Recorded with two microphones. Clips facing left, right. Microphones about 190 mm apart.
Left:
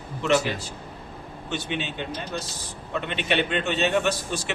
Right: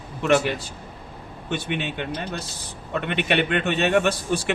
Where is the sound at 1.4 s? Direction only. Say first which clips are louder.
Right 3 dB; 55° right (ahead or behind).